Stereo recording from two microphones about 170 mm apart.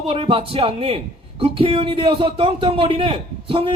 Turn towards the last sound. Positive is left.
turn(degrees=-30)  # may be behind; listen again after turning